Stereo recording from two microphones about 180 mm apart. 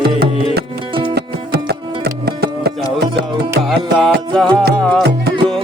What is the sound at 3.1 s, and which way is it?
Music, 65° right (ahead or behind).